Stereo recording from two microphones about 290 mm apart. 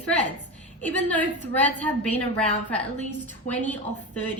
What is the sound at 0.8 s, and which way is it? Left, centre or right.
A woman's voice, centre.